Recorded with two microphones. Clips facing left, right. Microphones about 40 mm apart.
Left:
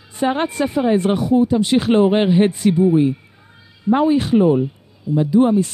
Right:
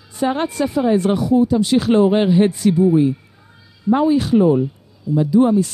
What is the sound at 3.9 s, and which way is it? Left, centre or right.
Speech, left.